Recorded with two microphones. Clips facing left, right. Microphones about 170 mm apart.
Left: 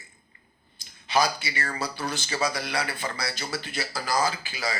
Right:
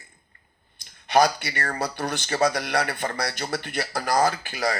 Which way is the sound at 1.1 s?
55° right (ahead or behind).